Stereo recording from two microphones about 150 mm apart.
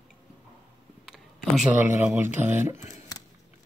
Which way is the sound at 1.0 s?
Centre (ahead or behind).